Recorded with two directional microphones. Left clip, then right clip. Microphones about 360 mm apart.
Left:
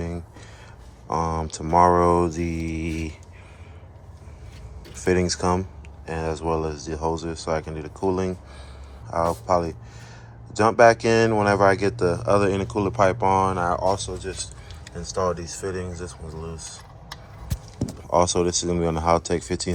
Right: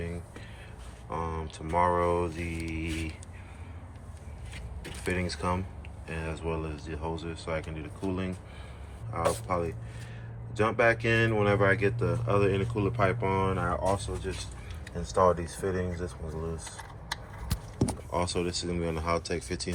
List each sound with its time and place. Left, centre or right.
1.1 s speech: centre
5.2 s speech: centre
18.1 s speech: centre